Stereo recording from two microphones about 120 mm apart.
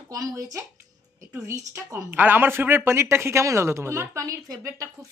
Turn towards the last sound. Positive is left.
turn(degrees=-25)  # may be behind; listen again after turning